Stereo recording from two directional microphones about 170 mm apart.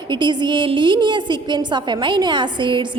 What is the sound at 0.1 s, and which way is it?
A woman's voice, 25° right (ahead or behind).